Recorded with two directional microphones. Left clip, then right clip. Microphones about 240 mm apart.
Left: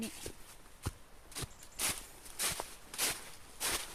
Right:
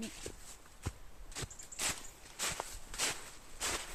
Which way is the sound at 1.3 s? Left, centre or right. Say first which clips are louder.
Even; centre.